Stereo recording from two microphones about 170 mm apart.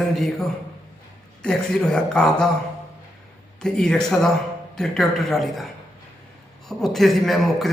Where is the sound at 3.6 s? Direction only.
5° left (ahead or behind).